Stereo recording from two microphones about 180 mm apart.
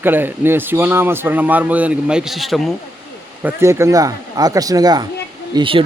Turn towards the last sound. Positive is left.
turn(degrees=-30)  # may be behind; listen again after turning